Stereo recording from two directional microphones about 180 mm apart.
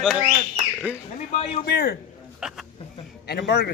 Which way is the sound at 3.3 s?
65° left (ahead or behind).